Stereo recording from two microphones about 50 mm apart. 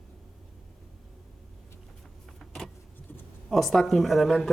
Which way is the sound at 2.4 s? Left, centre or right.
Centre.